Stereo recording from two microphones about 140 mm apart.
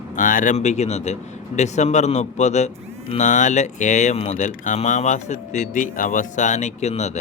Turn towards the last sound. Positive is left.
turn(degrees=55)  # may be behind; listen again after turning